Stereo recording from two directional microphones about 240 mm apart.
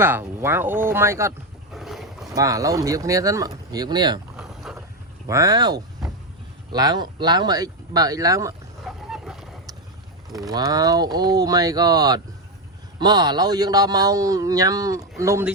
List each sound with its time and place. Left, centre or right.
0.0 s a man's voice: centre
1.7 s boat: centre
2.3 s a man's voice: centre
4.4 s boat: centre
5.2 s a man's voice: centre
8.8 s vehicle: centre
10.5 s a man's voice: centre